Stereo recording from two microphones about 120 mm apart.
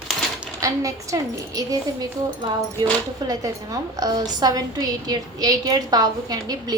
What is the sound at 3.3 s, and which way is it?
A woman's voice, 30° right (ahead or behind).